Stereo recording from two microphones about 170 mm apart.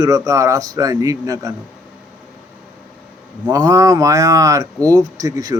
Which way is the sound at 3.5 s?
20° right (ahead or behind).